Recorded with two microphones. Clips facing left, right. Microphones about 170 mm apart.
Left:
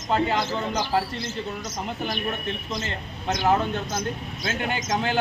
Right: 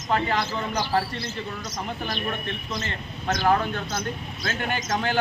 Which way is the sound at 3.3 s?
20° left (ahead or behind).